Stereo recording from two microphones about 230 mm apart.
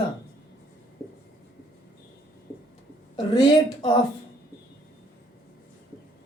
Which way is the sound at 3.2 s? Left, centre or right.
Centre.